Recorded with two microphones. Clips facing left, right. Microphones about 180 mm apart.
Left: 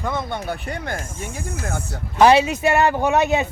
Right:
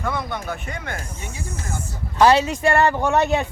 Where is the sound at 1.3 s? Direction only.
60° left (ahead or behind).